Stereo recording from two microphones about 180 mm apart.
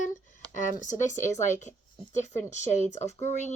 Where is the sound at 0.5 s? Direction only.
45° left (ahead or behind).